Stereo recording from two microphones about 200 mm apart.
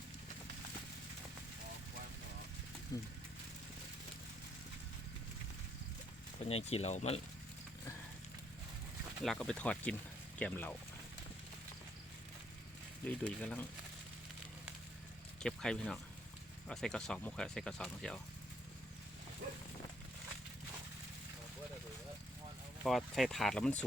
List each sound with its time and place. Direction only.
2.9 s speech: 15° left (ahead or behind)
6.5 s speech: 30° left (ahead or behind)
9.2 s speech: centre (ahead or behind)
13.1 s speech: 5° left (ahead or behind)
15.4 s speech: 5° left (ahead or behind)
22.8 s speech: centre (ahead or behind)